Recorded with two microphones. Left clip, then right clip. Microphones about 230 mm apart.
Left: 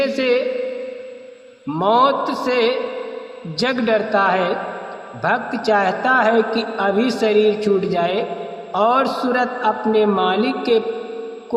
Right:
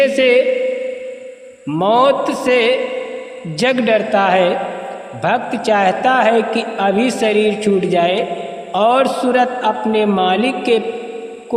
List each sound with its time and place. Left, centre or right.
0.0 s a man's voice: right
1.7 s a man's voice: right